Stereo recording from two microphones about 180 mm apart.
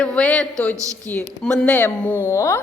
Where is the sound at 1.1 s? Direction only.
5° left (ahead or behind).